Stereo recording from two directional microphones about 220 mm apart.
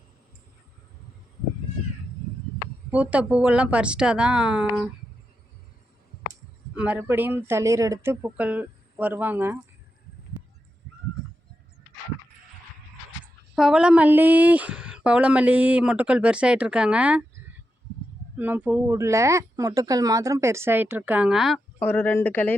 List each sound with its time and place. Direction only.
2.9 s speech: 5° right (ahead or behind)
6.7 s speech: 5° right (ahead or behind)
13.6 s speech: 5° right (ahead or behind)
18.3 s speech: 10° right (ahead or behind); by 22.5 s 10° left (ahead or behind)